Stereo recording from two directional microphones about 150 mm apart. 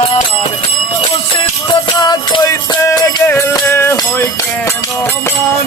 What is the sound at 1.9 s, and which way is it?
Music, 25° left (ahead or behind).